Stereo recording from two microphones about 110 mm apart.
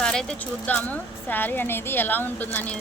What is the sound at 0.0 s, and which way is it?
A woman's voice, 5° left (ahead or behind).